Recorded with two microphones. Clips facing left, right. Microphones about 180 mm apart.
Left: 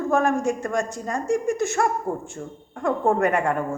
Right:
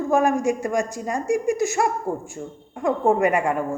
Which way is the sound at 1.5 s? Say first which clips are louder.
Right 2 dB; 60° left (ahead or behind).